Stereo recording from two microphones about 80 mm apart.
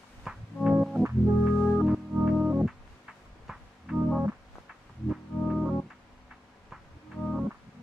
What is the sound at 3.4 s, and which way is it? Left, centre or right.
Music, centre.